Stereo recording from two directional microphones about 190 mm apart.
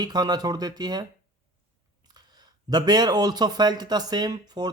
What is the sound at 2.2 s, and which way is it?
A man's voice, 20° right (ahead or behind).